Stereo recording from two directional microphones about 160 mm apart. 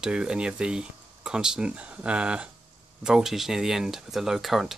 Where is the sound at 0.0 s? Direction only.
5° right (ahead or behind).